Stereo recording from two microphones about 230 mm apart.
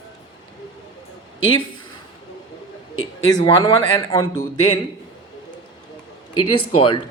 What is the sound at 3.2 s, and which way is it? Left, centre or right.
Speech, centre.